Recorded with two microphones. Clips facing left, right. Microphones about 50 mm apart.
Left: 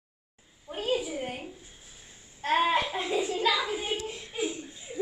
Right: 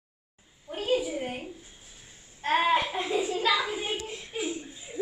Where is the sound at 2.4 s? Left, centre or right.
Centre.